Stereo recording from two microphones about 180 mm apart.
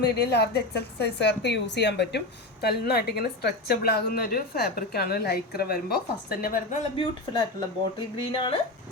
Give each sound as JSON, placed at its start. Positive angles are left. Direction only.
{"t": 0.0, "sound": "a woman's voice", "side_deg": 65}
{"t": 6.9, "sound": "speech", "side_deg": 30}